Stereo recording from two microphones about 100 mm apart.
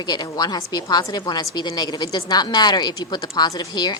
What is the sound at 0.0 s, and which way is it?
A woman's voice, 40° left (ahead or behind).